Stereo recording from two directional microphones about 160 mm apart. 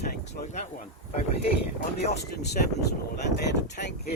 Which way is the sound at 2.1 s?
90° left.